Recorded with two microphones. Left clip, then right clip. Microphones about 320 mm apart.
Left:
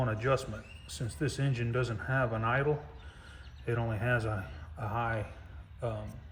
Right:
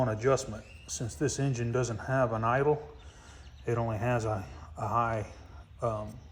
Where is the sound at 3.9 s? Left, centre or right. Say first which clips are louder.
Right 2 dB; centre.